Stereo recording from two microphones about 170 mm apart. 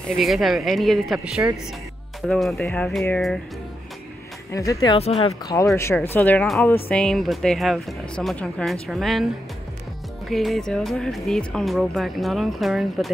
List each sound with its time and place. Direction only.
0.2 s speech: centre (ahead or behind)
4.5 s speech: 20° left (ahead or behind)
4.9 s speech: 35° left (ahead or behind)
6.1 s speech: 10° left (ahead or behind)